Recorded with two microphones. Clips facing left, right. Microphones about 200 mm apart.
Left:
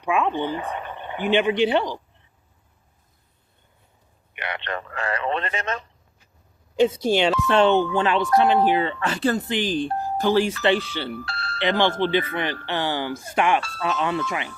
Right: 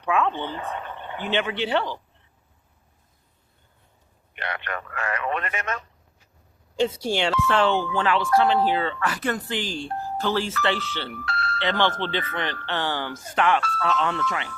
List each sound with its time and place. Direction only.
0.0 s speech: 15° left (ahead or behind)
4.4 s a man's voice: 25° left (ahead or behind)
7.0 s a man's voice: 20° left (ahead or behind)
11.1 s music: 30° left (ahead or behind)
11.6 s speech: 10° left (ahead or behind)
13.6 s speech: 25° left (ahead or behind)
14.0 s speech: 10° left (ahead or behind)